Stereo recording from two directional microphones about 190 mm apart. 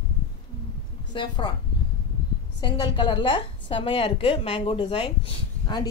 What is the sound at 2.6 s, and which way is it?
A woman's voice, 25° left (ahead or behind).